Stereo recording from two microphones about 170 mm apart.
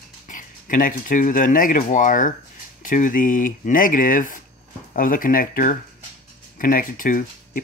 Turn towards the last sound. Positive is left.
turn(degrees=55)  # may be behind; listen again after turning